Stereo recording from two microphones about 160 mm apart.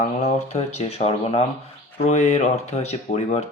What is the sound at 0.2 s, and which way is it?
Speech, 45° left (ahead or behind).